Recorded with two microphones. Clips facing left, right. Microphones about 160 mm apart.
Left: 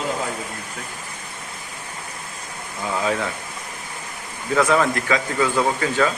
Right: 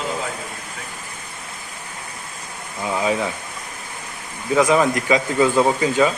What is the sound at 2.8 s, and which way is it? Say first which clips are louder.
Speech: right 2 dB; 15° right (ahead or behind).